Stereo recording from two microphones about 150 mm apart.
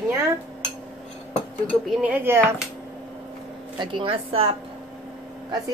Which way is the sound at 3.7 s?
35° right (ahead or behind).